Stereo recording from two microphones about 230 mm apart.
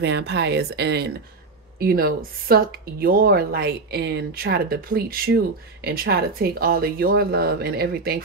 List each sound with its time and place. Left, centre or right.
0.0 s speech: right